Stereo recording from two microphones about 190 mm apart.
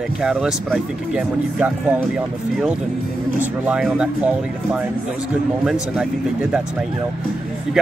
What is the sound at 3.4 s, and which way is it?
Speech, 5° right (ahead or behind).